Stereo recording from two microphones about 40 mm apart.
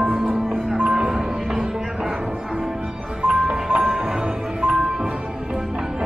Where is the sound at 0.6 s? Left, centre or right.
Centre.